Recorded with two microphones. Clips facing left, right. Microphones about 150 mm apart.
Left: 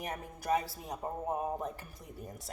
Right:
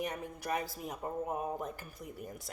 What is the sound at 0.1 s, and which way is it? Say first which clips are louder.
Speech: left 4 dB; 30° left (ahead or behind).